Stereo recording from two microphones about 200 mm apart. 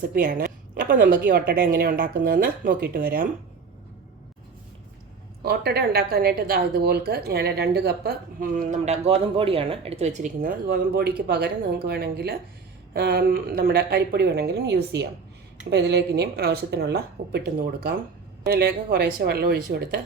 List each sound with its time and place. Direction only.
0.1 s speech: 45° right (ahead or behind)
5.4 s a woman's voice: 50° right (ahead or behind)